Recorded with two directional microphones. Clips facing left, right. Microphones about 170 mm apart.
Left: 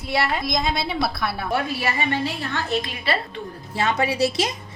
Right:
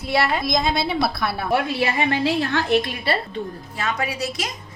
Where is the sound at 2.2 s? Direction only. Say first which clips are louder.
Right 6 dB; 80° right.